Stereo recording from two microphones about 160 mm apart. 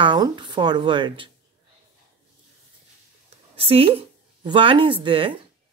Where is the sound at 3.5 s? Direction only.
35° right (ahead or behind).